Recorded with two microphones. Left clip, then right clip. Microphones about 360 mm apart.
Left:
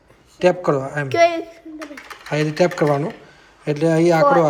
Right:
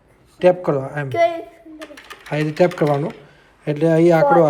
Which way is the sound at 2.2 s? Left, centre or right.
Centre.